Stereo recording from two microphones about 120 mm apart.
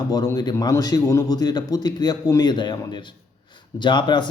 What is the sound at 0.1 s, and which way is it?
A man's voice, 30° left (ahead or behind).